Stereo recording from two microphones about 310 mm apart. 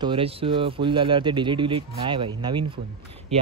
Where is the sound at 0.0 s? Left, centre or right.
Centre.